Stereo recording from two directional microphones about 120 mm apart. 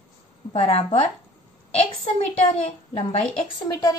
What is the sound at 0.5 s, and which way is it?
Speech, 55° left (ahead or behind).